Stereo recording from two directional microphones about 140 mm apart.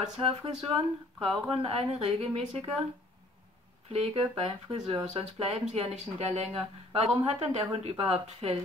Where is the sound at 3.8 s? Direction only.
45° right (ahead or behind).